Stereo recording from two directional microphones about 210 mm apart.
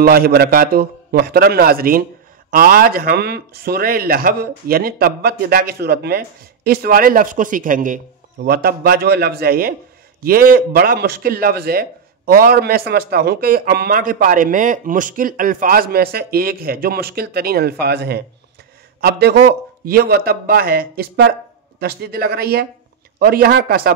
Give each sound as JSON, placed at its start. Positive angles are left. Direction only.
{"t": 0.0, "sound": "a man's voice", "side_deg": -45}